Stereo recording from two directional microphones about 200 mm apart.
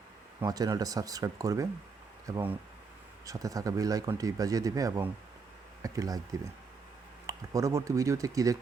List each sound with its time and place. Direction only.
0.3 s speech: 20° right (ahead or behind)
7.3 s speech: 15° right (ahead or behind)